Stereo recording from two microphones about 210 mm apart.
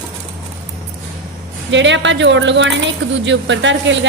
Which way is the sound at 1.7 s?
60° right (ahead or behind).